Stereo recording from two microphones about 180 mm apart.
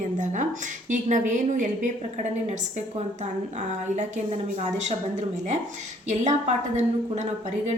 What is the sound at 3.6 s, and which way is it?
A woman's voice, 40° right (ahead or behind).